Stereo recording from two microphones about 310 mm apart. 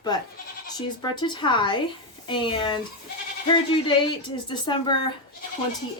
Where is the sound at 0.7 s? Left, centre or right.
Centre.